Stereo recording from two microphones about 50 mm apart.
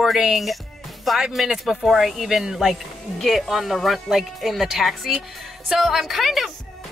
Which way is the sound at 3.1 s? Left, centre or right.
Centre.